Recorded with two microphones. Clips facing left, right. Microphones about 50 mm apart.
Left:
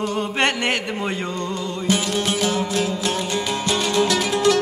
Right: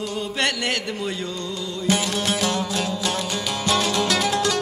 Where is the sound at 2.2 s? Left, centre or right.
Centre.